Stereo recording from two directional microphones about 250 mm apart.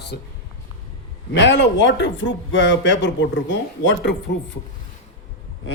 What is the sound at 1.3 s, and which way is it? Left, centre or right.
Speech, left.